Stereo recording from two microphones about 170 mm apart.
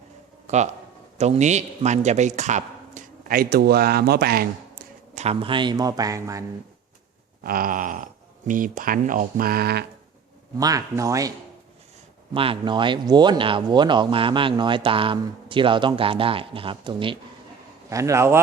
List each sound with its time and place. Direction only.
0.4 s speech: 40° right (ahead or behind); by 4.8 s 65° right (ahead or behind)
5.1 s speech: 40° right (ahead or behind); by 6.4 s 20° right (ahead or behind)
7.4 s speech: 60° right (ahead or behind)
10.6 s speech: 20° right (ahead or behind)
12.3 s speech: 30° right (ahead or behind)
17.8 s a man's voice: 20° right (ahead or behind)